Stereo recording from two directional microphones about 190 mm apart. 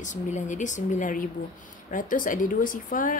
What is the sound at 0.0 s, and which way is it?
Speech, 40° left (ahead or behind).